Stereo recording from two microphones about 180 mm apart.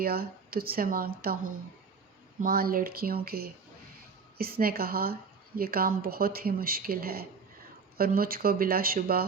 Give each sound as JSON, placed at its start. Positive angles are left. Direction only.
{"t": 0.0, "sound": "speech", "side_deg": -55}
{"t": 2.4, "sound": "speech", "side_deg": -55}